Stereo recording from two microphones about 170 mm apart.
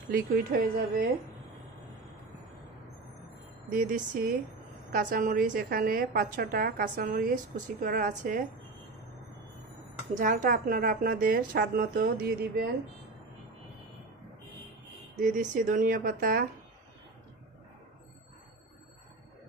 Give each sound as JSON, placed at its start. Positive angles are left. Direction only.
{"t": 0.1, "sound": "a woman's voice", "side_deg": -55}
{"t": 3.7, "sound": "a woman's voice", "side_deg": -50}
{"t": 10.1, "sound": "a woman's voice", "side_deg": -50}
{"t": 15.1, "sound": "speech", "side_deg": -50}